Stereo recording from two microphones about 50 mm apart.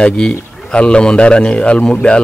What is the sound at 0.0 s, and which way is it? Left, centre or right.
A man's voice, centre.